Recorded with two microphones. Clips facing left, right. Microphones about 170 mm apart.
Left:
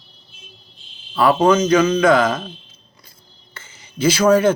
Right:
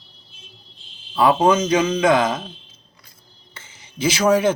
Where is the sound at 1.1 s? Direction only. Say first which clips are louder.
Left 1 dB; 20° right (ahead or behind).